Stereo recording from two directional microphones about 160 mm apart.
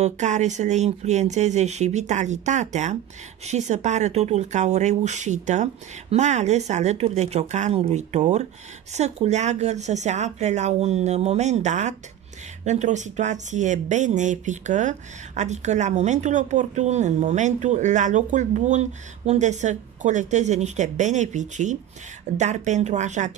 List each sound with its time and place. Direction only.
0.0 s speech: 45° right (ahead or behind)